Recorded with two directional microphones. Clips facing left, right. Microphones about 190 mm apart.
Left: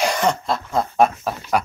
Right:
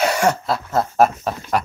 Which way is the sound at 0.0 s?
10° right (ahead or behind).